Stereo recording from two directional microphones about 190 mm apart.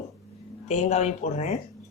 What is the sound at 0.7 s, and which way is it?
Speech, 35° left (ahead or behind).